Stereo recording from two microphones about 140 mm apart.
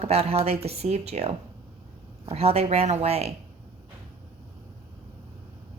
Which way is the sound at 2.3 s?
45° right (ahead or behind).